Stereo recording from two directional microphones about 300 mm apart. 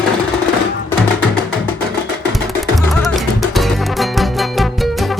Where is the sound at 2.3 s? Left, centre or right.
Centre.